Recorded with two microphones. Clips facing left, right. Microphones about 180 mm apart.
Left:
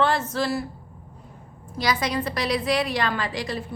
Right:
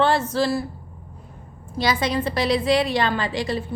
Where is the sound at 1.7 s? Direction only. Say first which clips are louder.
Right 3 dB; 25° right (ahead or behind).